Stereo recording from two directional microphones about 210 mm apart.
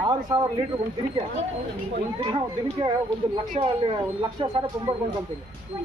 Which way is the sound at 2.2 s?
25° right (ahead or behind).